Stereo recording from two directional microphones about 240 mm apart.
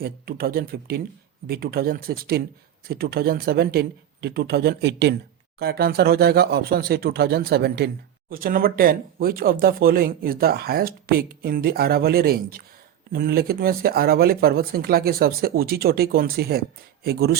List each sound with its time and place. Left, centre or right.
0.0 s speech: right